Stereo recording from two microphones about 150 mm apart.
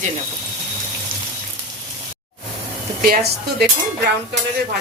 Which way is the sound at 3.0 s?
80° right.